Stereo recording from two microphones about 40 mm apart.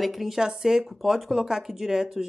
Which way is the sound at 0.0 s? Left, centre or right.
Centre.